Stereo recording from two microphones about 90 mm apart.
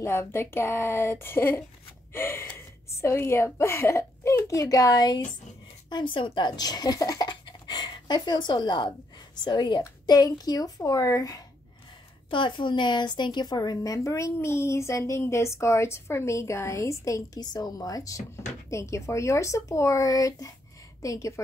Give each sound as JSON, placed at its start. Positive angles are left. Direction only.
{"t": 0.0, "sound": "a woman's voice", "side_deg": 30}
{"t": 5.9, "sound": "a child's voice", "side_deg": 65}
{"t": 12.3, "sound": "a woman's voice", "side_deg": 65}